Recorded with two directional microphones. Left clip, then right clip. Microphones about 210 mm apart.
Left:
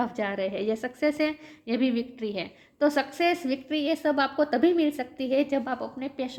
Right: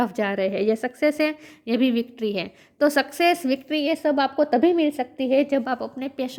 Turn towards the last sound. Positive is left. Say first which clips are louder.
# right 4 dB
turn(degrees=-45)  # may be behind; listen again after turning